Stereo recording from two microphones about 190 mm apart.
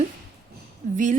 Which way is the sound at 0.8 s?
45° right (ahead or behind).